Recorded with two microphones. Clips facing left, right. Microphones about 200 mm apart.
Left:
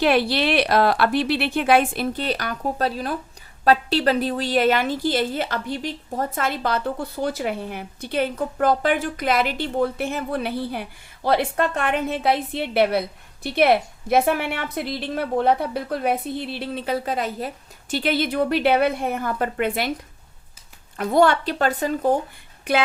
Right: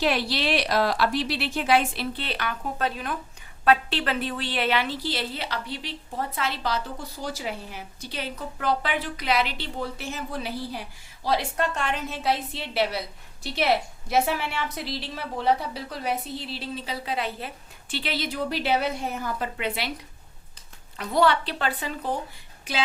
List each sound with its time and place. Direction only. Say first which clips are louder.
0.0 s a woman's voice: left 6 dB; 55° left (ahead or behind)
21.0 s a child's voice: left 5 dB; 50° left (ahead or behind)
22.7 s a woman's voice: left 8 dB; 55° left (ahead or behind)